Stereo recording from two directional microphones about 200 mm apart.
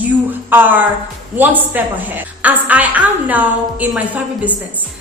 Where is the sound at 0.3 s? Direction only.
10° right (ahead or behind).